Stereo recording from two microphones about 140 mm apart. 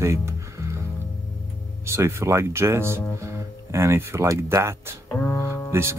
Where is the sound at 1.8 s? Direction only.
20° right (ahead or behind).